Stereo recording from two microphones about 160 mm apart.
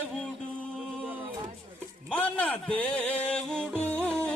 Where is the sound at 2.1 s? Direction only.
10° left (ahead or behind).